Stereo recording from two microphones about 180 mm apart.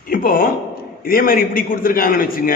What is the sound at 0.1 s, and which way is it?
A man's voice, 50° left (ahead or behind).